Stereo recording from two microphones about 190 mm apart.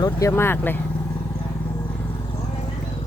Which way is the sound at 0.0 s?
15° left (ahead or behind).